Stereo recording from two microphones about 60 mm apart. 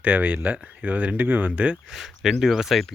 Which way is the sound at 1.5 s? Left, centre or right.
Right.